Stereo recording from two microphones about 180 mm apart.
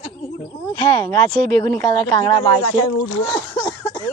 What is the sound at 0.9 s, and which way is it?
Speech, 20° left (ahead or behind).